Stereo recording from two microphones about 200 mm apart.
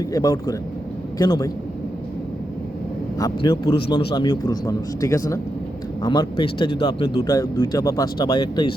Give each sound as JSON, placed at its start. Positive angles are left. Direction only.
{"t": 0.0, "sound": "a man's voice", "side_deg": 15}
{"t": 3.2, "sound": "speech", "side_deg": 20}